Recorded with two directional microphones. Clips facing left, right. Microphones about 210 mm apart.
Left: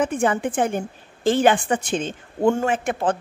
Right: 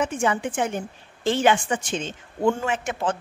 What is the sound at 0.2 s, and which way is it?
A woman's voice, 50° left (ahead or behind).